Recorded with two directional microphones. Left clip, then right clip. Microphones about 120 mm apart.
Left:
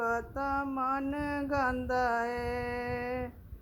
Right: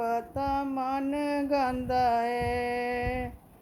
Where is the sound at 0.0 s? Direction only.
15° right (ahead or behind).